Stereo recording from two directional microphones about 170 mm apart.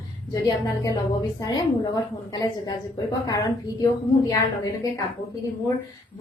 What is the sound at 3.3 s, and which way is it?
Speech, 20° left (ahead or behind).